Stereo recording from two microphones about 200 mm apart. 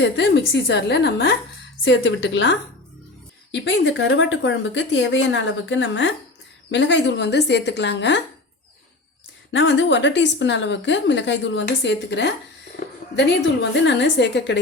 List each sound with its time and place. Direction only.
0.0 s a woman's voice: 60° left (ahead or behind)
9.5 s a woman's voice: 65° left (ahead or behind)